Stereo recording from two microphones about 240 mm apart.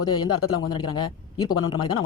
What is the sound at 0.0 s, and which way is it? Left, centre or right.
A man's voice, centre.